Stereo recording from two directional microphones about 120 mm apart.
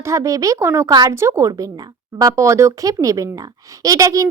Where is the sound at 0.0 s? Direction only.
25° right (ahead or behind).